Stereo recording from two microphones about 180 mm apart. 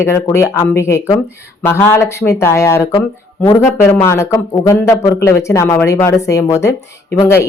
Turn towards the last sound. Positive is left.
turn(degrees=15)  # may be behind; listen again after turning